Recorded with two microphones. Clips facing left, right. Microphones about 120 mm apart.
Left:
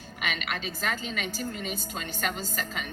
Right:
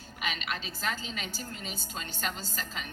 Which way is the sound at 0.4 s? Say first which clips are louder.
Left 2 dB; 55° left (ahead or behind).